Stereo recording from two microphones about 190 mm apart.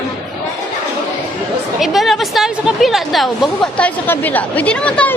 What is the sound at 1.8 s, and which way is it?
A woman's voice, centre (ahead or behind).